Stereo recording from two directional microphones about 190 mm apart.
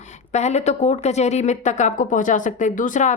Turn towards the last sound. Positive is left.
turn(degrees=40)  # may be behind; listen again after turning